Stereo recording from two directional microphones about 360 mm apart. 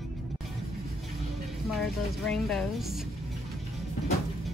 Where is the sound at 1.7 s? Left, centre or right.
Centre.